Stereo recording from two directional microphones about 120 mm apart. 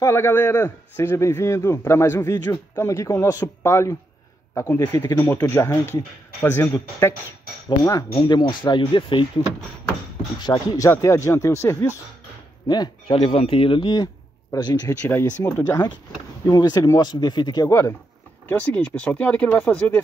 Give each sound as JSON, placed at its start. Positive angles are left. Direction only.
{"t": 0.0, "sound": "speech", "side_deg": 20}
{"t": 10.4, "sound": "speech", "side_deg": 35}
{"t": 12.6, "sound": "speech", "side_deg": 35}
{"t": 13.0, "sound": "speech", "side_deg": 50}
{"t": 15.0, "sound": "speech", "side_deg": 20}
{"t": 18.5, "sound": "speech", "side_deg": 10}